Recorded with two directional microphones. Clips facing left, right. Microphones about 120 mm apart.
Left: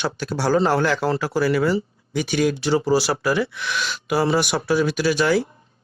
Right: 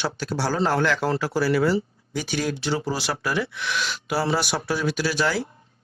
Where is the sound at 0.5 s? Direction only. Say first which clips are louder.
Left 4 dB; 40° left (ahead or behind).